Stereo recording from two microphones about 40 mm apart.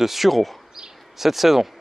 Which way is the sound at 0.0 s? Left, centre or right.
Centre.